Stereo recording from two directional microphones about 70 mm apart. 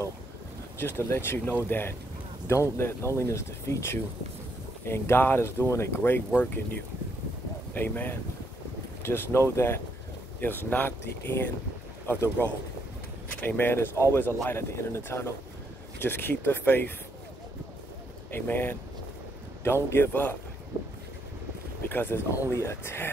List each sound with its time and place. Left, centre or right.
0.7 s speech: left
7.7 s speech: left
18.3 s speech: left
21.8 s speech: left